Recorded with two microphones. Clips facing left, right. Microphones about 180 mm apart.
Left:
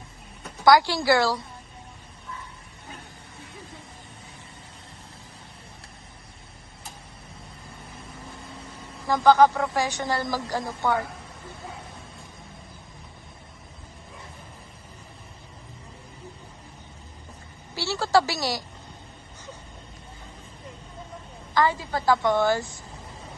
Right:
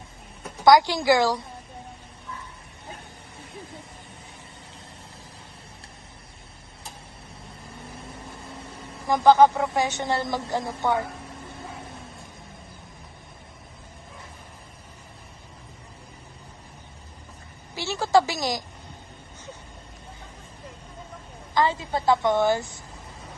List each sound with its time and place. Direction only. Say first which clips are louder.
0.6 s a woman's voice: right 1 dB; 20° right (ahead or behind)
9.0 s a woman's voice: right 1 dB; 20° right (ahead or behind)
17.7 s a woman's voice: right 1 dB; 15° right (ahead or behind)
21.5 s a woman's voice: even; 25° right (ahead or behind)